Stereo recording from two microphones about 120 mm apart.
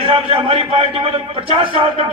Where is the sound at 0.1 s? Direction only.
50° right (ahead or behind).